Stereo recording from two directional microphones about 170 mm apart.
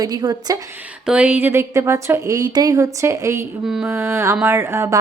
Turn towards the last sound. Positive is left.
turn(degrees=-15)  # may be behind; listen again after turning